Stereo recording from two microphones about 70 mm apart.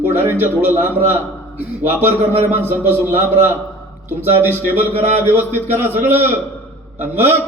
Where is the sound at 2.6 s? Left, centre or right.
Right.